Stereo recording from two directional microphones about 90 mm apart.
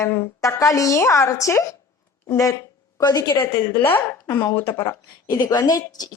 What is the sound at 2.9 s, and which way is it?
Speech, 45° left (ahead or behind).